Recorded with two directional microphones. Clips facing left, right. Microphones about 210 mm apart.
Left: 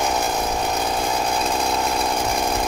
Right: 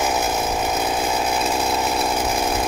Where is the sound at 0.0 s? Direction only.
5° right (ahead or behind).